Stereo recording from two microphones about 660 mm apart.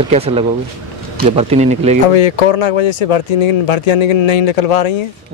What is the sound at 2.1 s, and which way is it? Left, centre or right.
Speech, left.